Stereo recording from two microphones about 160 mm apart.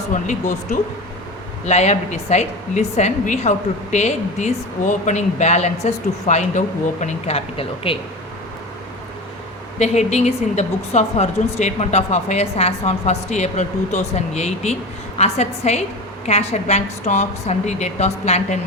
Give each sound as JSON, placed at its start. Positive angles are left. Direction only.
{"t": 0.1, "sound": "speech", "side_deg": 50}
{"t": 9.7, "sound": "speech", "side_deg": 45}